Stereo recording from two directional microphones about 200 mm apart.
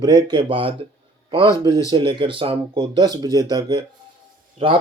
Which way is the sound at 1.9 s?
25° right (ahead or behind).